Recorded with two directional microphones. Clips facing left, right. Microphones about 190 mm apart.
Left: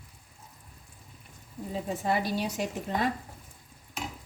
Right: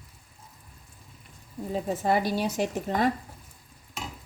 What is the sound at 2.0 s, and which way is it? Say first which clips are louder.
Speech: right 3 dB; 45° right (ahead or behind).